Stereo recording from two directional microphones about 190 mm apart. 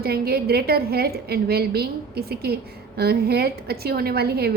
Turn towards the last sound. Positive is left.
turn(degrees=-55)  # may be behind; listen again after turning